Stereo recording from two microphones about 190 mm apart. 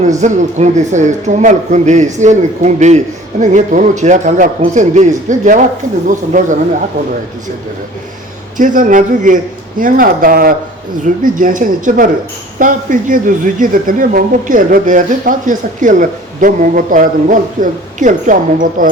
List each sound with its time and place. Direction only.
0.2 s speech: 40° right (ahead or behind)
8.5 s speech: 45° right (ahead or behind)